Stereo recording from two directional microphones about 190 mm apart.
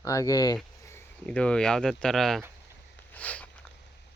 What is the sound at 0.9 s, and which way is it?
Speech, 10° left (ahead or behind).